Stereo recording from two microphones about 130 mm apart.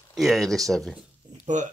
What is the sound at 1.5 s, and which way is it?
Speech, 70° right (ahead or behind).